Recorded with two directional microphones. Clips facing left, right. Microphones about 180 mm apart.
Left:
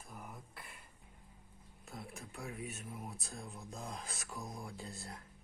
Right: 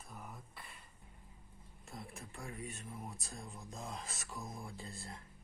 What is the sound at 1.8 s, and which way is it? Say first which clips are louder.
Speech: left 1 dB; centre (ahead or behind).